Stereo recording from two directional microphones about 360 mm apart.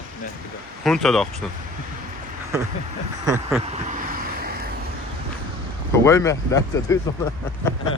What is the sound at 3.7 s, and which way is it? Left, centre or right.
Vehicle, right.